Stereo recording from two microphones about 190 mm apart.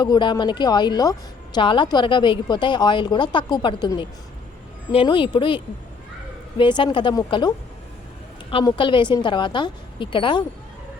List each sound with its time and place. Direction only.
0.0 s a woman's voice: 25° left (ahead or behind)